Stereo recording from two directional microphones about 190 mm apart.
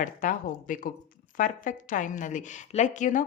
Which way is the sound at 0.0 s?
45° left (ahead or behind).